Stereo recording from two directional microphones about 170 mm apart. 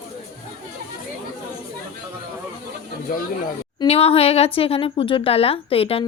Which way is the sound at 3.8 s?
35° left (ahead or behind).